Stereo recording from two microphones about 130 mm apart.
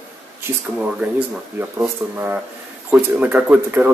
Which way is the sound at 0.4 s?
10° right (ahead or behind).